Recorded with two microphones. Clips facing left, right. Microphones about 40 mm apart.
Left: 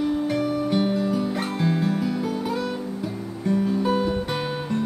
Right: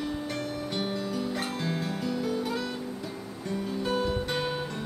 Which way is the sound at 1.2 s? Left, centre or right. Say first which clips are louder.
Left 6 dB; centre.